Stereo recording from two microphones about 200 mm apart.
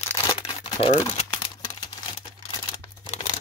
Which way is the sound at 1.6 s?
20° left (ahead or behind).